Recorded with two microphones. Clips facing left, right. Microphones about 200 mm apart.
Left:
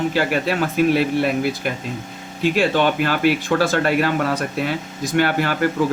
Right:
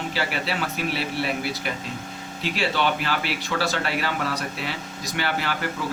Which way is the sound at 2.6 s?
50° left (ahead or behind).